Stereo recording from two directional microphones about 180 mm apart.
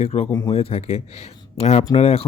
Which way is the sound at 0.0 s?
35° left (ahead or behind).